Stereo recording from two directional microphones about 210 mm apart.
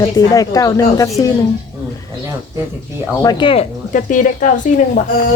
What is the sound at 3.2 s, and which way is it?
Speech, 25° left (ahead or behind).